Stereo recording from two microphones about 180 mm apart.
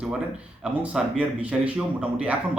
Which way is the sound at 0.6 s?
5° right (ahead or behind).